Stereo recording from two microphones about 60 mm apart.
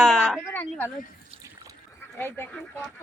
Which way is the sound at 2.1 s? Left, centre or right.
Left.